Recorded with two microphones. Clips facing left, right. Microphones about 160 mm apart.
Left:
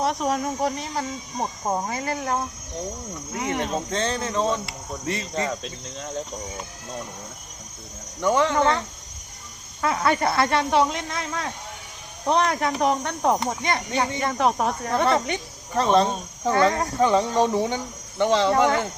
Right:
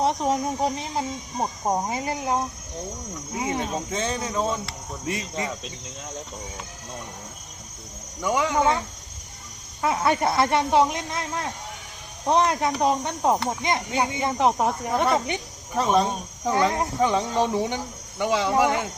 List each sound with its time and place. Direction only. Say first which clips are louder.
0.0 s speech: right 1 dB; 20° right (ahead or behind); by 5.7 s 5° right (ahead or behind)
8.2 s speech: left 2 dB; 10° right (ahead or behind)
9.8 s speech: even; 20° right (ahead or behind)
17.3 s speech: left 2 dB; 15° left (ahead or behind)
18.2 s speech: left 2 dB; 5° right (ahead or behind)